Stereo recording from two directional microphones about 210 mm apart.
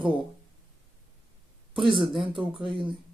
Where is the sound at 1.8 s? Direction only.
25° right (ahead or behind).